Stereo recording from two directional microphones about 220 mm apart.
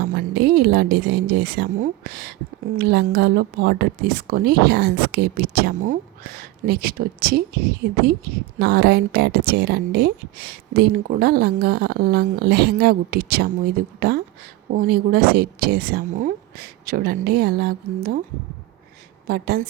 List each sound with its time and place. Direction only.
0.1 s speech: 45° right (ahead or behind)
19.3 s speech: 45° right (ahead or behind)